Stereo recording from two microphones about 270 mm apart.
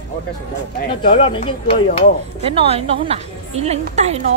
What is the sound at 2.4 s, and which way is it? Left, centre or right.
A woman's voice, right.